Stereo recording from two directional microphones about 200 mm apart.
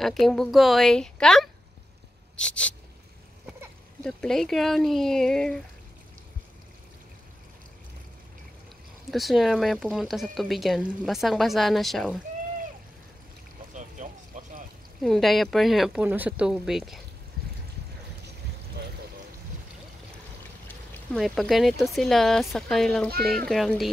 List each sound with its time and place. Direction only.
0.0 s speech: centre (ahead or behind)
2.3 s a sound: 5° left (ahead or behind)
4.0 s speech: 5° left (ahead or behind)
9.1 s speech: centre (ahead or behind)
13.7 s a sound: 40° right (ahead or behind)
15.0 s speech: centre (ahead or behind)
20.6 s speech: 5° left (ahead or behind)